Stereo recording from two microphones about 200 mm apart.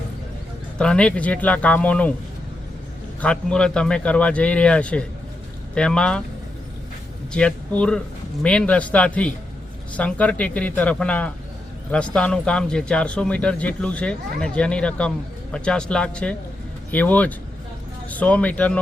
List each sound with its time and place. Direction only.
0.8 s speech: 5° left (ahead or behind)
3.2 s speech: 5° left (ahead or behind)
7.3 s speech: 5° left (ahead or behind)